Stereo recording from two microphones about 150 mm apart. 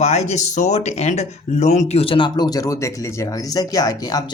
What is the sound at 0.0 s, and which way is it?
Speech, 45° left (ahead or behind).